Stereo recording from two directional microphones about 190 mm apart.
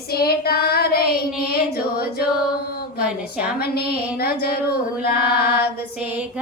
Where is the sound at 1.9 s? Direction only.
55° left (ahead or behind).